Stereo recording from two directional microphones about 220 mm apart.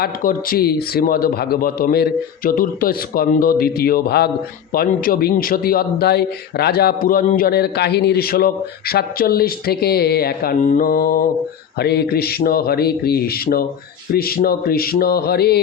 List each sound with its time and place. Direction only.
0.0 s a man's voice: 40° left (ahead or behind)